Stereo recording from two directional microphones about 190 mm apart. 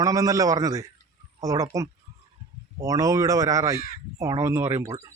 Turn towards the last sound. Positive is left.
turn(degrees=-15)  # may be behind; listen again after turning